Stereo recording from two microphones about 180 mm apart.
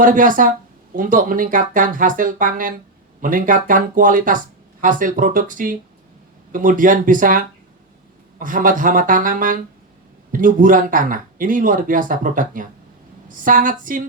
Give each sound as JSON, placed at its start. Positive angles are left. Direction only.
{"t": 0.0, "sound": "speech", "side_deg": -50}